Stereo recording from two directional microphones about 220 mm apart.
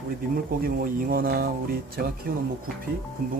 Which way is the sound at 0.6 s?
40° right (ahead or behind).